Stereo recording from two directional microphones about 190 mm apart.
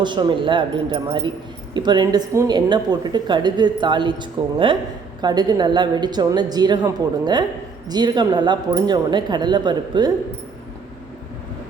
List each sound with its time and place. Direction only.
0.0 s speech: 25° right (ahead or behind)